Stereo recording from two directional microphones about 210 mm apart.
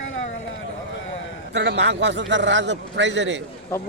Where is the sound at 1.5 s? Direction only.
55° right (ahead or behind).